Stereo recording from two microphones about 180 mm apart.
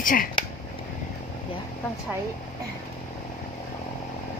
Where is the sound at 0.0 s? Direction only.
50° left (ahead or behind).